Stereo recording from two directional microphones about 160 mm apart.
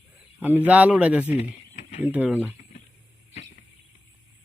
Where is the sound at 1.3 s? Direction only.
45° left (ahead or behind).